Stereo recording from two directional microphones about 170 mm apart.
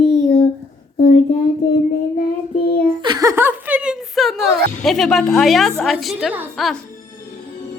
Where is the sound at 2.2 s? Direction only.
65° left (ahead or behind).